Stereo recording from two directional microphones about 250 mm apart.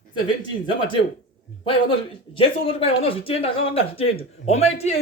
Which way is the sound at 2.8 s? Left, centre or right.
Left.